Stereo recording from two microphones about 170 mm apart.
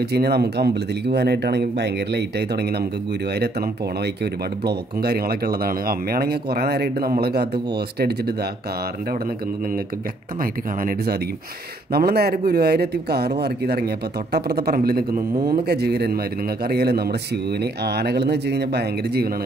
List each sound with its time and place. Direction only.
0.0 s speech: 70° right (ahead or behind)
4.0 s speech: 75° right (ahead or behind)
10.4 s a man's voice: 55° right (ahead or behind)
11.9 s a man's voice: 65° right (ahead or behind)